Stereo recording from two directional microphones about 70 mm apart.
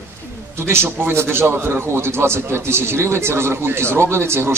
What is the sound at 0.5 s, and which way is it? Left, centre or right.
A man's voice, right.